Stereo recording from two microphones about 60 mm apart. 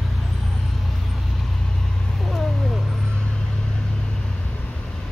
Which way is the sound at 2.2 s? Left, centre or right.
Centre.